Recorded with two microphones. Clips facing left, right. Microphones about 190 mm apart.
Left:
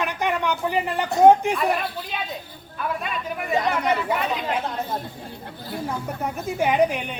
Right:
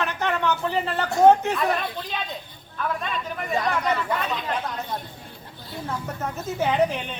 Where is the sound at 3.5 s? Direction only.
20° left (ahead or behind).